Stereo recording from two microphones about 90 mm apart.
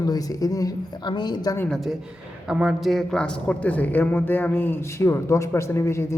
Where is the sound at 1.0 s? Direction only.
55° left (ahead or behind).